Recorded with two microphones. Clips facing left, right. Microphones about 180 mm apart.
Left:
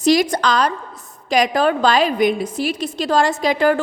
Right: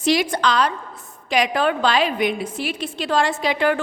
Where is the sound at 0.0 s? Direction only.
40° left (ahead or behind).